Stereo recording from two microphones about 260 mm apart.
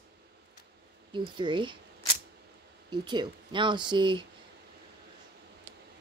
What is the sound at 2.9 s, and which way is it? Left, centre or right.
Speech, centre.